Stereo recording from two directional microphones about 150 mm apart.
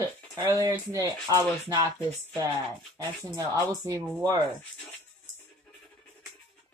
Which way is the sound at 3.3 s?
20° right (ahead or behind).